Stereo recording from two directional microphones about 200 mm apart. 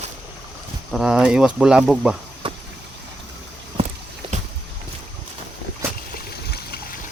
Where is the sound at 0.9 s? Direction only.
Centre (ahead or behind).